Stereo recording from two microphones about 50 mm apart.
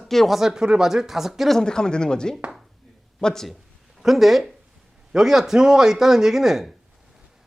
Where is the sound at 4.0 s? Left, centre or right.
Centre.